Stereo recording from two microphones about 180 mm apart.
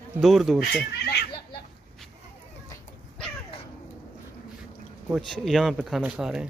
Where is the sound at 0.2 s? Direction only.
Centre (ahead or behind).